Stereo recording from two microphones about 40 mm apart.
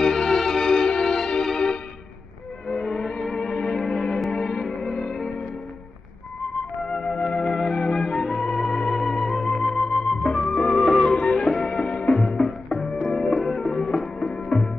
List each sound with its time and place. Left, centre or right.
0.0 s music: centre
7.0 s music: centre
12.2 s music: centre